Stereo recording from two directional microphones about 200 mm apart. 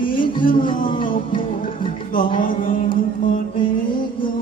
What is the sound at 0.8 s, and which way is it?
Music, 40° left (ahead or behind).